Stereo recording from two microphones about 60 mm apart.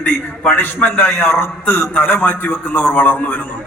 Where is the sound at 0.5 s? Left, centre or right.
Left.